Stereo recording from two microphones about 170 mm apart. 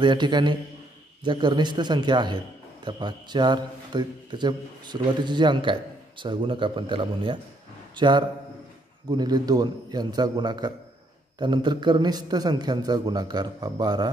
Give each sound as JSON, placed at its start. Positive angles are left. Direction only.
{"t": 0.0, "sound": "a man's voice", "side_deg": -25}